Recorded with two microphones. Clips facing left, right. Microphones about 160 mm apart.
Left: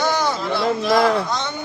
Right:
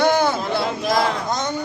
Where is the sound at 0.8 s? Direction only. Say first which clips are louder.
Left 5 dB; 45° right (ahead or behind).